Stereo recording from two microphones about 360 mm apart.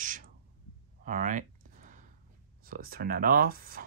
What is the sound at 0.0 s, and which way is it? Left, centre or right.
Owl, right.